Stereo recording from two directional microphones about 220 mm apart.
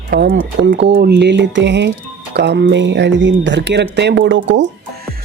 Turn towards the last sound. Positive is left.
turn(degrees=-60)  # may be behind; listen again after turning